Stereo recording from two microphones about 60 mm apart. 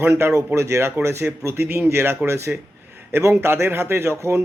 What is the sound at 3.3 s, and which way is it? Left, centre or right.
Speech, right.